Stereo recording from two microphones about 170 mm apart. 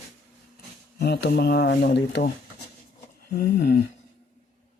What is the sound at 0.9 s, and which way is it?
Speech, 75° left (ahead or behind).